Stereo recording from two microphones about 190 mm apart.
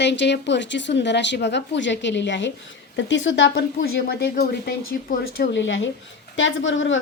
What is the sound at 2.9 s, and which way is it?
Speech, 80° left.